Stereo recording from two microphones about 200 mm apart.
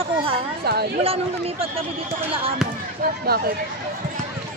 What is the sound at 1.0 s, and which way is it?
Speech, 30° right (ahead or behind).